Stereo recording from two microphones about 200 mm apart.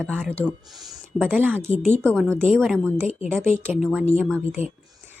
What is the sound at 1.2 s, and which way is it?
Speech, 10° right (ahead or behind).